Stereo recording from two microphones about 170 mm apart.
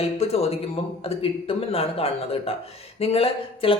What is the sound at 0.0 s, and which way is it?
Speech, 35° left (ahead or behind).